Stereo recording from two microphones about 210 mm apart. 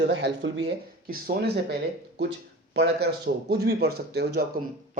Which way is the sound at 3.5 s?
50° right (ahead or behind).